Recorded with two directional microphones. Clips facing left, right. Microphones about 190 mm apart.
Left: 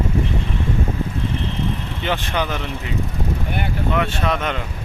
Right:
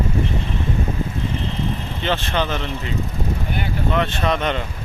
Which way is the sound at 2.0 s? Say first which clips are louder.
Right 1 dB; 10° left (ahead or behind).